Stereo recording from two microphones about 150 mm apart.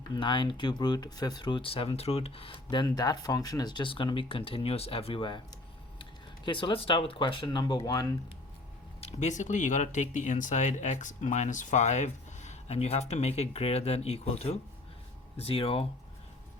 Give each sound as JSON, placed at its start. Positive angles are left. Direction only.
{"t": 0.1, "sound": "speech", "side_deg": 30}
{"t": 9.0, "sound": "speech", "side_deg": 45}